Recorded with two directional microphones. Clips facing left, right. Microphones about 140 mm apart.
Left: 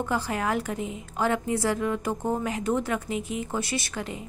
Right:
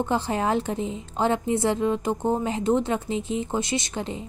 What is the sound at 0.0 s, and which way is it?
A woman's voice, 25° right (ahead or behind).